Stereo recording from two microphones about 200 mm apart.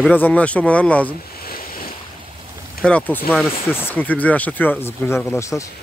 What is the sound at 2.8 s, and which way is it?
A man's voice, 5° left (ahead or behind).